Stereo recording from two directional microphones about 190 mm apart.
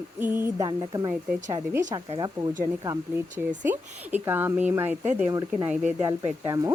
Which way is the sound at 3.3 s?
10° right (ahead or behind).